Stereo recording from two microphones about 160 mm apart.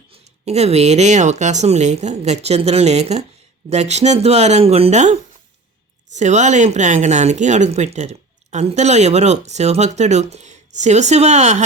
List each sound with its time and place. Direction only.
0.1 s a woman's voice: 40° right (ahead or behind)